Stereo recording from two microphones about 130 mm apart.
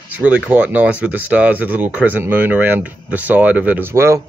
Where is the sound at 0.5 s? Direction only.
10° right (ahead or behind).